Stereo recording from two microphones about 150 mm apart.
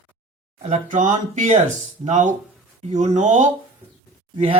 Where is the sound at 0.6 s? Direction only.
55° right (ahead or behind).